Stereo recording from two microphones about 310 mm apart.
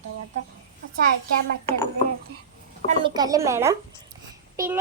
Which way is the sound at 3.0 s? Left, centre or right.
Centre.